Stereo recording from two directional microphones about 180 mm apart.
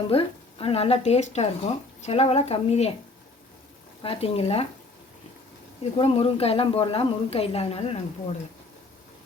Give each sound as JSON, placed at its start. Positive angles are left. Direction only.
{"t": 0.1, "sound": "speech", "side_deg": 30}
{"t": 4.0, "sound": "speech", "side_deg": 30}
{"t": 6.0, "sound": "speech", "side_deg": 30}